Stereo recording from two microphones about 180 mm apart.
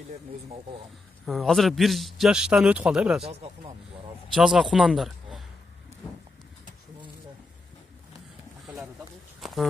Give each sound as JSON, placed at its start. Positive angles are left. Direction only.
{"t": 1.2, "sound": "speech", "side_deg": 0}
{"t": 4.3, "sound": "speech", "side_deg": 0}
{"t": 9.4, "sound": "a sound", "side_deg": 0}